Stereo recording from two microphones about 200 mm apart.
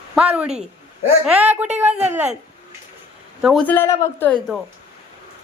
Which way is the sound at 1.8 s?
10° right (ahead or behind).